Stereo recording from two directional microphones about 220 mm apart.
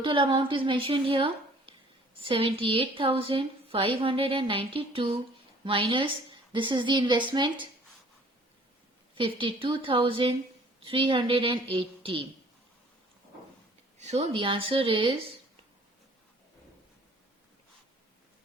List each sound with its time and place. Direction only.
0.0 s a woman's voice: 25° right (ahead or behind)
9.1 s a woman's voice: 25° right (ahead or behind)
14.0 s a woman's voice: 30° right (ahead or behind)